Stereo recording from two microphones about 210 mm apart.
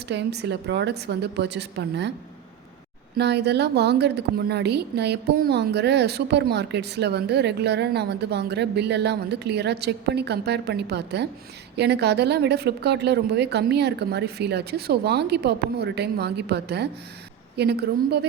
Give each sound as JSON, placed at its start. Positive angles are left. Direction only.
{"t": 0.1, "sound": "a woman's voice", "side_deg": -55}
{"t": 3.2, "sound": "a woman's voice", "side_deg": -50}